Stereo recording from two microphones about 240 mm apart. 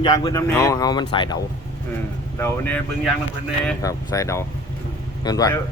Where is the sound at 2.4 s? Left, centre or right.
Centre.